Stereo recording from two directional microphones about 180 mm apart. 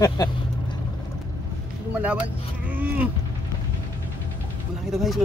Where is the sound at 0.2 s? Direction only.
20° left (ahead or behind).